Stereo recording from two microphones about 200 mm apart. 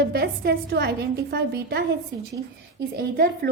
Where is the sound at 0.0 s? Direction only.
55° right (ahead or behind).